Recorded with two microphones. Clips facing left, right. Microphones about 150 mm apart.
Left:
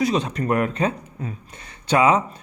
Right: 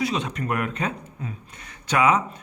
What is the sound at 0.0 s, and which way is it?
A man's voice, 35° left (ahead or behind).